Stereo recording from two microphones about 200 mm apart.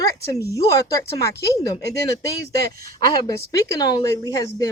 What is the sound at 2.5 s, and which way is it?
Speech, 50° right (ahead or behind).